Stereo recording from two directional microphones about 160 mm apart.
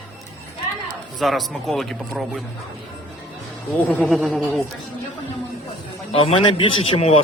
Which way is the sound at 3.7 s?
10° left (ahead or behind).